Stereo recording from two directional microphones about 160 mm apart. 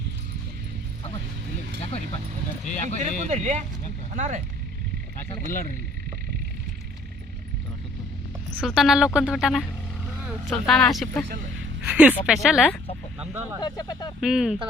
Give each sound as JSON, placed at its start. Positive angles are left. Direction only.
{"t": 2.6, "sound": "speech", "side_deg": 45}
{"t": 3.0, "sound": "speech", "side_deg": -45}
{"t": 5.5, "sound": "speech", "side_deg": 55}
{"t": 8.6, "sound": "speech", "side_deg": 0}
{"t": 10.7, "sound": "speech", "side_deg": 0}
{"t": 11.9, "sound": "speech", "side_deg": -10}
{"t": 13.1, "sound": "speech", "side_deg": -15}
{"t": 13.6, "sound": "speech", "side_deg": 25}
{"t": 14.2, "sound": "speech", "side_deg": -5}